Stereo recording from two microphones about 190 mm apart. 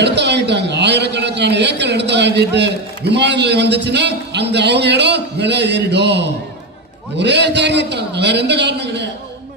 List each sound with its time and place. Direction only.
0.0 s a man's voice: 65° right (ahead or behind)